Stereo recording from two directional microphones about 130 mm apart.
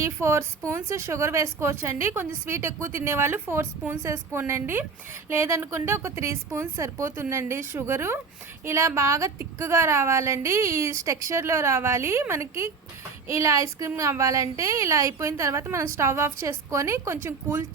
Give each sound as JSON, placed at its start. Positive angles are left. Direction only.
{"t": 0.0, "sound": "a woman's voice", "side_deg": -20}